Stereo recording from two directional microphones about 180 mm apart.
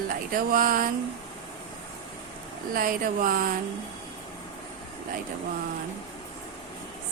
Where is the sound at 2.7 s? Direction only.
50° right (ahead or behind).